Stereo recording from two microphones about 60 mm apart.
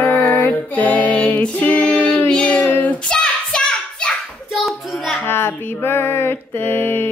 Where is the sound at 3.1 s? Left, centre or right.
Centre.